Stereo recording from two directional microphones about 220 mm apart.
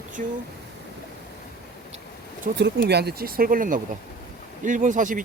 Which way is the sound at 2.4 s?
45° right (ahead or behind).